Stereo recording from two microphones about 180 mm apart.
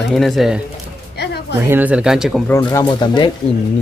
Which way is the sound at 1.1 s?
65° left (ahead or behind).